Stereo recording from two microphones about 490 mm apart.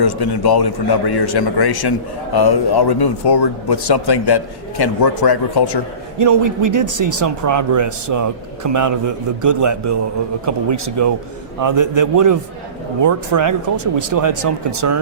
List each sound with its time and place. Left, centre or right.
0.0 s a man's voice: left
6.1 s speech: right